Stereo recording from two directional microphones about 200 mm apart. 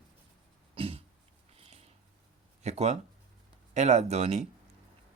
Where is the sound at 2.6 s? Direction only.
35° right (ahead or behind).